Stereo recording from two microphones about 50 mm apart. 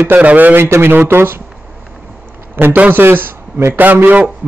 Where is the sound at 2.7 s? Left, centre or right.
Right.